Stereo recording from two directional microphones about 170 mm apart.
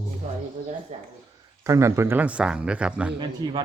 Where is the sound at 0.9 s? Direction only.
40° right (ahead or behind).